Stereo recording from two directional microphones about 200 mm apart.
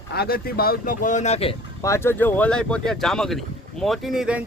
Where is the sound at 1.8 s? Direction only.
15° left (ahead or behind); by 4.4 s 5° right (ahead or behind).